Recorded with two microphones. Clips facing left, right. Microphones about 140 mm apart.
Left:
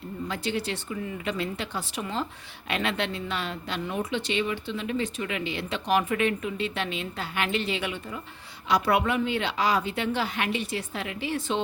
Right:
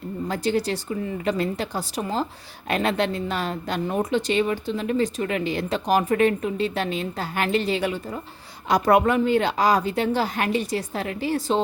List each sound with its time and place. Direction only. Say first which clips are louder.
0.3 s speech: right 7 dB; 40° right (ahead or behind)